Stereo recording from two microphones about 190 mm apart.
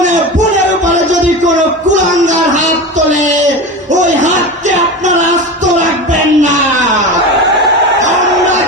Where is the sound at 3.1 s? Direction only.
40° right (ahead or behind).